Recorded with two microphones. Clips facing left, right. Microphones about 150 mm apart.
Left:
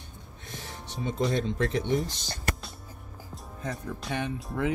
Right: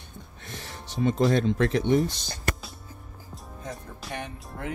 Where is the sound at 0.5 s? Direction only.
75° right (ahead or behind).